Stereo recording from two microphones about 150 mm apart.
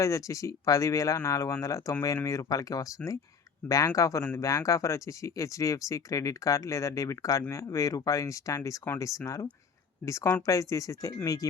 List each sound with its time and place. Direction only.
0.0 s speech: 20° left (ahead or behind)